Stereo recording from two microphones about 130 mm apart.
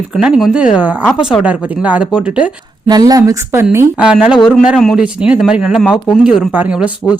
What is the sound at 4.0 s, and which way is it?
Speech, 10° right (ahead or behind).